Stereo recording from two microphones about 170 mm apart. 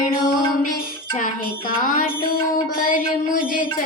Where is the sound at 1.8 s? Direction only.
55° left (ahead or behind).